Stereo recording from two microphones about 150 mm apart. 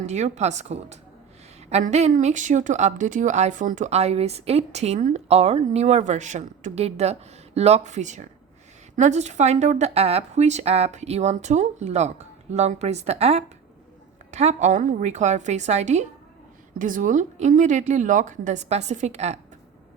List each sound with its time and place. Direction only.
0.0 s a woman's voice: 50° right (ahead or behind)
16.7 s a woman's voice: 60° right (ahead or behind)